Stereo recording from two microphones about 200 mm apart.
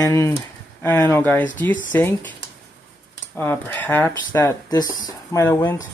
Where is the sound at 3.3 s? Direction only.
10° left (ahead or behind).